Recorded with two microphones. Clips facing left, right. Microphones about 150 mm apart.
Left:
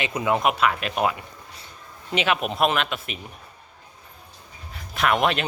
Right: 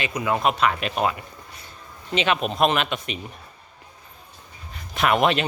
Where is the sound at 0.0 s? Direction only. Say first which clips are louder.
Even; 20° left (ahead or behind); by 1.1 s 5° left (ahead or behind).